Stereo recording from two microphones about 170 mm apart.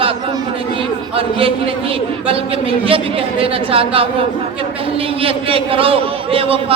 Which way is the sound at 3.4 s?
35° right (ahead or behind).